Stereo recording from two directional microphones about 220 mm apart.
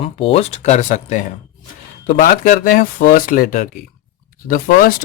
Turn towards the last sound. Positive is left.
turn(degrees=40)  # may be behind; listen again after turning